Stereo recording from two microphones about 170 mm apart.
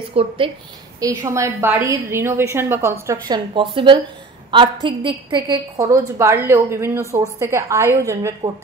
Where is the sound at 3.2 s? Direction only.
25° right (ahead or behind).